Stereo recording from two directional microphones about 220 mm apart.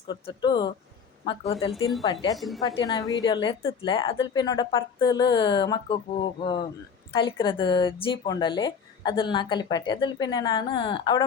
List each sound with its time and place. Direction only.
0.1 s speech: 20° left (ahead or behind)
2.3 s a woman's voice: centre (ahead or behind)
2.6 s speech: 15° left (ahead or behind)